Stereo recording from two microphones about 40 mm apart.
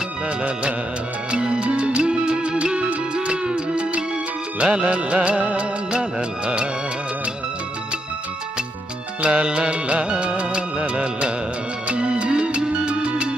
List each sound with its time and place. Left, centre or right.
1.3 s music: right
4.6 s music of bollywood: right
6.4 s music: right
9.2 s music: right